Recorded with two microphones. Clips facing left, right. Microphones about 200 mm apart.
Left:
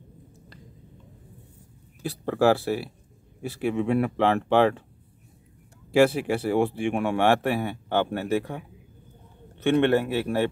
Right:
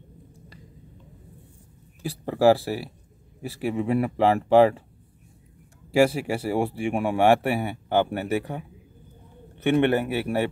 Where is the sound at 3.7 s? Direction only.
5° right (ahead or behind).